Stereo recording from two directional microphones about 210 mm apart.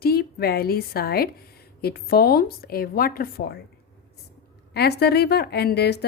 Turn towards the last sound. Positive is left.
turn(degrees=50)  # may be behind; listen again after turning